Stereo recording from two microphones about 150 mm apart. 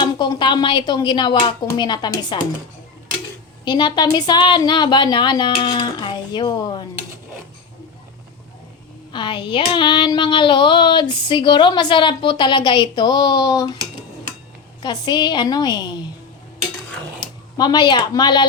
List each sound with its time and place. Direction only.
0.0 s speech: 30° left (ahead or behind)
3.6 s speech: 30° left (ahead or behind)
9.1 s speech: 30° left (ahead or behind)
14.8 s speech: 30° left (ahead or behind)
17.2 s speech: 30° left (ahead or behind)